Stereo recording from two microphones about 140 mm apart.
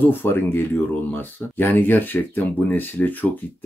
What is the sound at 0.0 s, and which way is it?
Speech, 15° left (ahead or behind).